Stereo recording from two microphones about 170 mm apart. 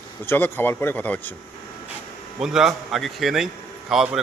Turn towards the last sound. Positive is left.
turn(degrees=0)  # may be behind; listen again after turning